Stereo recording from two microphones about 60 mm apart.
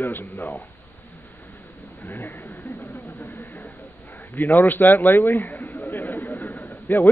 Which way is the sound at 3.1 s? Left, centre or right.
Left.